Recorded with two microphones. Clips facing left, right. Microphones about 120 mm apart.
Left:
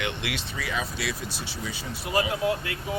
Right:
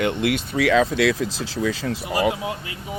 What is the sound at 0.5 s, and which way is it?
Speech, 90° right.